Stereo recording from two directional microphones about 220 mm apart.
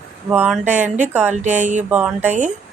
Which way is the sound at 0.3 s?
5° right (ahead or behind).